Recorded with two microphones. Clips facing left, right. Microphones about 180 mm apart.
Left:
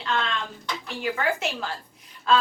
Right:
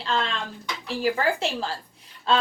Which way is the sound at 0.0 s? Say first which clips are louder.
Right 1 dB; 30° right (ahead or behind).